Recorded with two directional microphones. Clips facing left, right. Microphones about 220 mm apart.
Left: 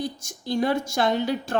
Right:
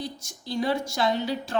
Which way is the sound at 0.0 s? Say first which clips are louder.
Left 5 dB; 50° left (ahead or behind).